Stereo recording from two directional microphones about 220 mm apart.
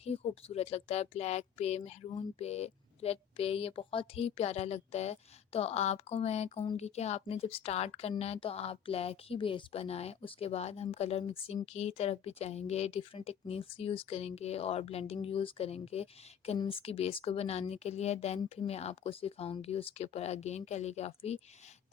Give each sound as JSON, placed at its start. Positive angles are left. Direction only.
{"t": 0.0, "sound": "speech", "side_deg": 30}